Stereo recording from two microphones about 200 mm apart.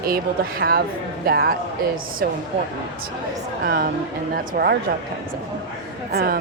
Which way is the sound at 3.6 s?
50° right (ahead or behind).